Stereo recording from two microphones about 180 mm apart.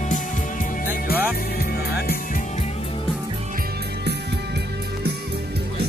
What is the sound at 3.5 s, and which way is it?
Music, 65° right (ahead or behind).